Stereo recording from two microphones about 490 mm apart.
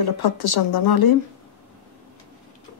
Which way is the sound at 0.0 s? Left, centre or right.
Left.